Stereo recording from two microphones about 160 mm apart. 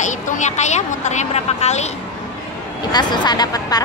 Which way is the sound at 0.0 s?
45° left (ahead or behind).